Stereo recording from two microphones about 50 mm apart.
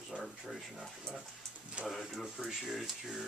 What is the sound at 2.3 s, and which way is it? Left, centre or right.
Speech, centre.